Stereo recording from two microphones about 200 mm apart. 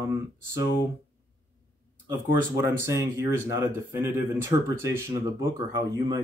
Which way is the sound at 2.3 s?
15° right (ahead or behind).